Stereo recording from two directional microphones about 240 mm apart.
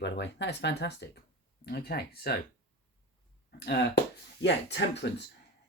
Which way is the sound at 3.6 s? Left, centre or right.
Left.